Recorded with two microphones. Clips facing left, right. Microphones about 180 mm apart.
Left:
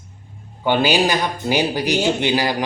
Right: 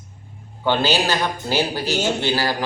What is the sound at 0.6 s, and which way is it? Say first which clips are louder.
A man's voice: left 3 dB; 15° left (ahead or behind).